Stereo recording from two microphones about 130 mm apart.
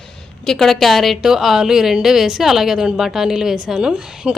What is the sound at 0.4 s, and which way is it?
A woman's voice, 5° left (ahead or behind).